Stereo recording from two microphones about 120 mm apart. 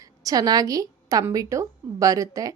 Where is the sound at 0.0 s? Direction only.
30° right (ahead or behind).